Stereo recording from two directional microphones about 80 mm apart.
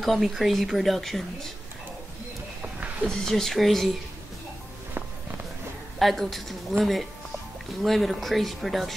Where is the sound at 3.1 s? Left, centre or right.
Centre.